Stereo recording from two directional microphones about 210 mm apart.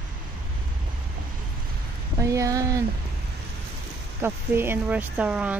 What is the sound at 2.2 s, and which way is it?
Speech, 15° right (ahead or behind).